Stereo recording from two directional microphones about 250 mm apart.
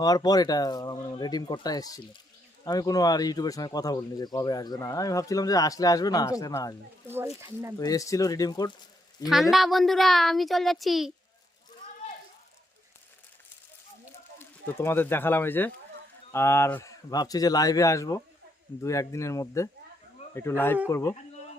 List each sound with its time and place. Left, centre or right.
0.0 s speech: centre
7.1 s speech: centre
7.8 s speech: centre
9.2 s a woman's voice: centre
14.3 s speech: centre